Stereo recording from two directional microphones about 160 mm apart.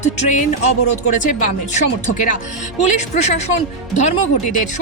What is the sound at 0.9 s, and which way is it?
Speech, 50° left (ahead or behind).